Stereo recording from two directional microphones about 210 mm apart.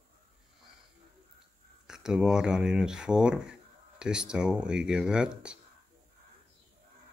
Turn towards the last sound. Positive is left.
turn(degrees=-5)  # may be behind; listen again after turning